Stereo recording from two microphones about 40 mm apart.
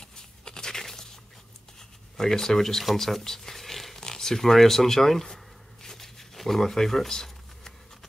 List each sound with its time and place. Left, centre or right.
0.0 s a sound: centre
1.8 s speech: centre
4.0 s zipper: centre